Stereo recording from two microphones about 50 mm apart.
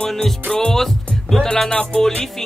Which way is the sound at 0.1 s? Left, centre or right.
Centre.